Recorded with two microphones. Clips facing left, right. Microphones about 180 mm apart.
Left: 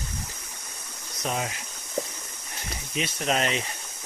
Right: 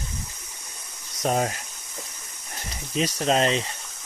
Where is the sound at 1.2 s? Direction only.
40° right (ahead or behind).